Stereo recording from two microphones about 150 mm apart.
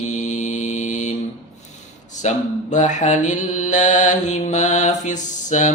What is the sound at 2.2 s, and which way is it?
Mantra, 50° left (ahead or behind).